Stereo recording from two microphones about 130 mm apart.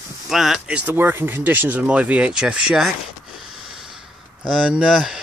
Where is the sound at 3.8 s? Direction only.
5° right (ahead or behind).